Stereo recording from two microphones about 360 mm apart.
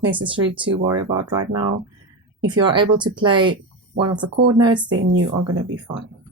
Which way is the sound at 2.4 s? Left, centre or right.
Centre.